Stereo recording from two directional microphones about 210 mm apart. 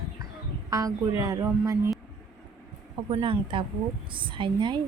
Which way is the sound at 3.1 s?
25° right (ahead or behind).